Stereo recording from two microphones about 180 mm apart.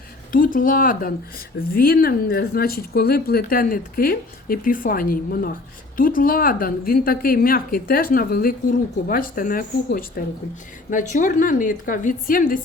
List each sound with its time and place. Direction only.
0.3 s a woman's voice: 50° left (ahead or behind)